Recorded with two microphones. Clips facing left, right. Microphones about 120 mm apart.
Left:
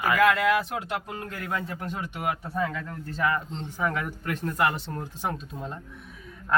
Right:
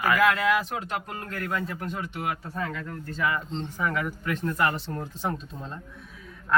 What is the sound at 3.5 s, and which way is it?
Speech, 10° left (ahead or behind).